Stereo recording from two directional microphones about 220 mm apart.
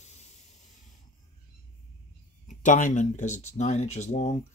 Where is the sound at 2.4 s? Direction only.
35° left (ahead or behind).